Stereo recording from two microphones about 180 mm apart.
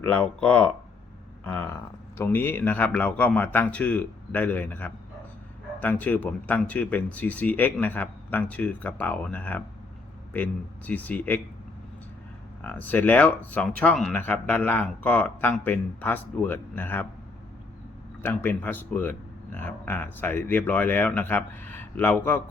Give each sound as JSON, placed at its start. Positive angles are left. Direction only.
{"t": 0.0, "sound": "speech", "side_deg": 5}
{"t": 12.6, "sound": "speech", "side_deg": 10}
{"t": 18.2, "sound": "speech", "side_deg": 10}